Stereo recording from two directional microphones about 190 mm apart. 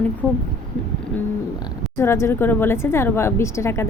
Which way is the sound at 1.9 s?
15° left (ahead or behind).